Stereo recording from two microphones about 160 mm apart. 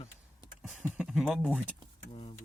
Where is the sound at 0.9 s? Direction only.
Centre (ahead or behind).